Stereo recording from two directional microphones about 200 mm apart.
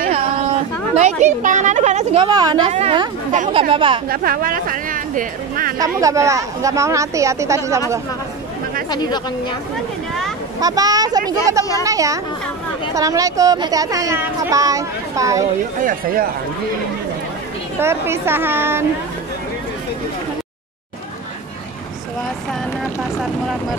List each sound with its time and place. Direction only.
0.9 s speech: 35° right (ahead or behind)
2.2 s a woman's voice: 20° right (ahead or behind)
4.1 s speech: 45° right (ahead or behind)
5.8 s speech: 15° right (ahead or behind)
8.9 s speech: 20° left (ahead or behind)
10.6 s speech: 20° right (ahead or behind)
15.8 s speech: 45° right (ahead or behind)
17.7 s speech: 10° right (ahead or behind)